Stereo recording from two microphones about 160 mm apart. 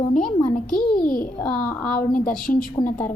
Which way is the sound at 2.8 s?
25° left (ahead or behind).